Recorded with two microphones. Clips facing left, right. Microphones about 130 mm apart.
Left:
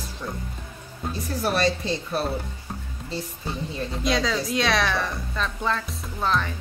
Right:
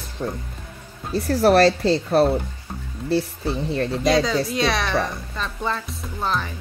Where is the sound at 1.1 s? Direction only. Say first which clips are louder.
Right 10 dB; 65° right (ahead or behind).